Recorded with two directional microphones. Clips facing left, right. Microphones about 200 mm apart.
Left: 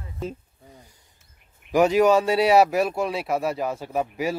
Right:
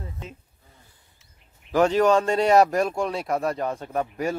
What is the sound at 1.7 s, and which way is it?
Speech, 10° left (ahead or behind).